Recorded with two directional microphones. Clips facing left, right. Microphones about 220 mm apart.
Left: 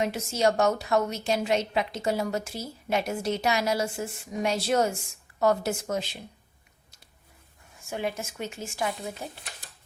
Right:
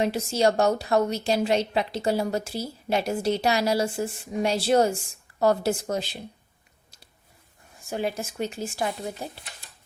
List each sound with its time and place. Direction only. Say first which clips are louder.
0.0 s a woman's voice: right 3 dB; 30° right (ahead or behind)
7.9 s a woman's voice: right 3 dB; 35° right (ahead or behind)